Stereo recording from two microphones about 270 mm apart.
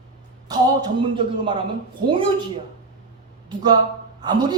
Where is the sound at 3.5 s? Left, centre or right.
Centre.